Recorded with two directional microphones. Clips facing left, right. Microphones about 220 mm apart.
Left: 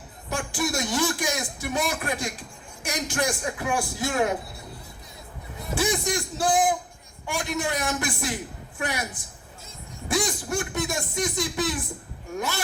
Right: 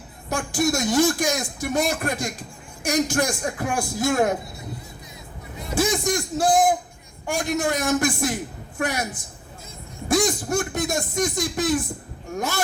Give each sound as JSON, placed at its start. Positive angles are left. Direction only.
{"t": 0.3, "sound": "a man's voice", "side_deg": -45}
{"t": 5.7, "sound": "a man's voice", "side_deg": -45}
{"t": 10.1, "sound": "a man's voice", "side_deg": -45}